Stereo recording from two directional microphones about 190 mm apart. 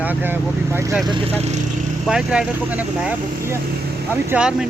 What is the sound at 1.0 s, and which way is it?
Speech, 25° right (ahead or behind).